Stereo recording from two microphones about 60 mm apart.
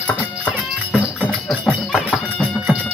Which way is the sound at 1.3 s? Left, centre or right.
Centre.